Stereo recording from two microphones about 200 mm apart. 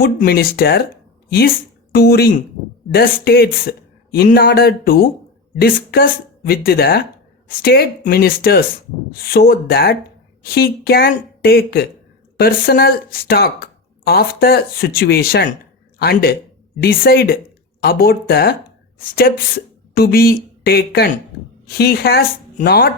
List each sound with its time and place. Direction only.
0.0 s speech: 50° left (ahead or behind)